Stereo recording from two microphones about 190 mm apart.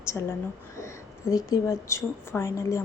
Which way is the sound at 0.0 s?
15° left (ahead or behind).